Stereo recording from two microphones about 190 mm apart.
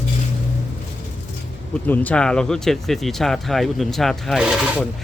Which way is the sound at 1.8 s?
10° left (ahead or behind).